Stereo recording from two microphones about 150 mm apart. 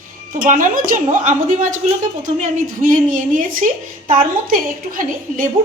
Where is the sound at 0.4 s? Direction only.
60° right (ahead or behind).